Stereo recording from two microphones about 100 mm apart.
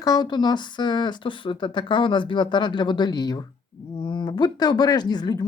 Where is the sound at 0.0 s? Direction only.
45° left (ahead or behind).